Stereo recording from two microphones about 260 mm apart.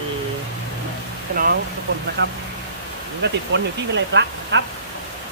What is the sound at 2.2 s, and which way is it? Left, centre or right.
Speech, right.